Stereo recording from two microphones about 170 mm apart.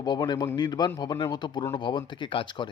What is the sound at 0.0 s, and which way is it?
Speech, 25° left (ahead or behind).